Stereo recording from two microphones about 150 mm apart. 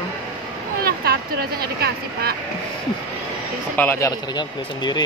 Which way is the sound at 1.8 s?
90° right.